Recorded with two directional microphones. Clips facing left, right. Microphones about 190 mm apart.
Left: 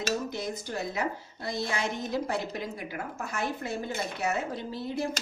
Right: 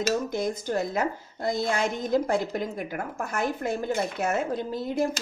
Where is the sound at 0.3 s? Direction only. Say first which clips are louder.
Right 7 dB; 45° right (ahead or behind).